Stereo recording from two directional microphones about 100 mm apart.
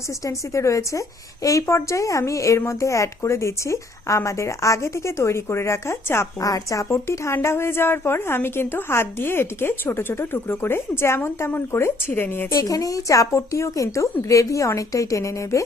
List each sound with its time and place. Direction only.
0.3 s a woman's voice: 30° left (ahead or behind)
12.5 s a woman's voice: 35° left (ahead or behind)